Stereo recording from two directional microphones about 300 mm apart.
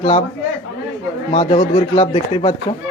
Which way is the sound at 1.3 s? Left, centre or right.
Centre.